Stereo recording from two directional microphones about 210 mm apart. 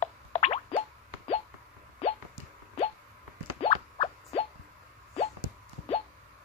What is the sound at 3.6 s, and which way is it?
Plop, 25° left (ahead or behind).